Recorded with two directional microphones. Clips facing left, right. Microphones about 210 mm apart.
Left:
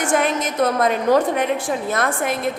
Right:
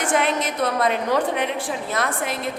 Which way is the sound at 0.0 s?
45° left (ahead or behind).